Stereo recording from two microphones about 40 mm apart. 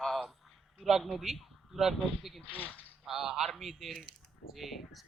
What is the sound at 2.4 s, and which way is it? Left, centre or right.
Speech, left.